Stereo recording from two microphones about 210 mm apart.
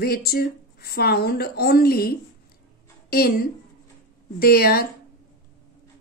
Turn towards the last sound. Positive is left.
turn(degrees=45)  # may be behind; listen again after turning